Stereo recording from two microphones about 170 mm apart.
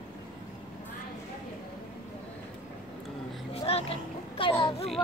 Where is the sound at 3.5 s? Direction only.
35° left (ahead or behind).